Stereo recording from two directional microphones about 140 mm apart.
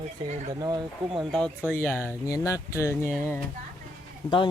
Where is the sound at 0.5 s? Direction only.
30° right (ahead or behind).